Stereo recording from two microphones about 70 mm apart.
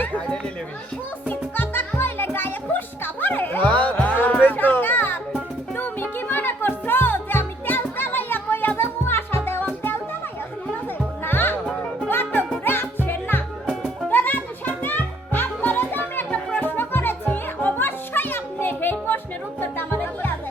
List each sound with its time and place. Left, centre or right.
1.3 s music: left
11.3 s music: left
13.7 s music: centre
14.1 s music: left
16.3 s music: centre
16.6 s music: left